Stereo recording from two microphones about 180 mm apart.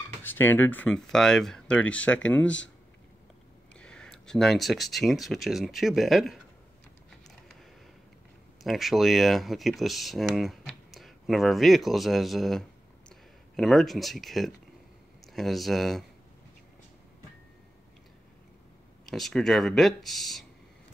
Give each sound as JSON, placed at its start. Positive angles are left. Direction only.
{"t": 0.2, "sound": "speech", "side_deg": 10}
{"t": 3.7, "sound": "speech", "side_deg": 5}
{"t": 7.1, "sound": "a sound", "side_deg": 0}
{"t": 8.6, "sound": "speech", "side_deg": 0}
{"t": 19.0, "sound": "speech", "side_deg": 0}